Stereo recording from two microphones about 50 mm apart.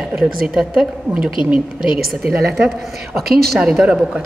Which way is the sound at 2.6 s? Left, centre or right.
Centre.